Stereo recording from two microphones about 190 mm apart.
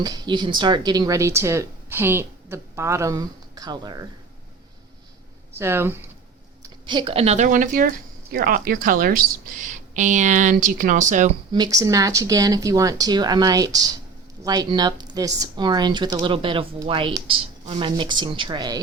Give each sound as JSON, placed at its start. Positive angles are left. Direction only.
{"t": 0.0, "sound": "speech", "side_deg": -20}
{"t": 5.5, "sound": "speech", "side_deg": -10}
{"t": 6.6, "sound": "speech", "side_deg": -25}
{"t": 11.5, "sound": "speech", "side_deg": -20}